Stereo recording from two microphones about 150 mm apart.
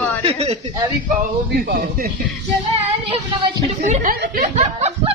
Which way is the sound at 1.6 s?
75° right (ahead or behind).